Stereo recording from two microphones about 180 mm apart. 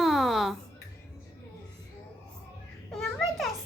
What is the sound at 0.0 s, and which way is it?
Music, centre (ahead or behind).